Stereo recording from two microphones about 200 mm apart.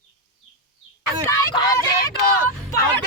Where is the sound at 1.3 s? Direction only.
20° left (ahead or behind).